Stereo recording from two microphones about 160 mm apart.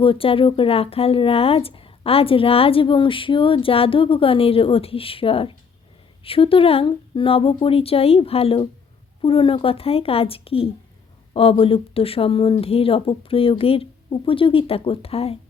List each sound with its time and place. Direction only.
0.0 s speech: 35° left (ahead or behind)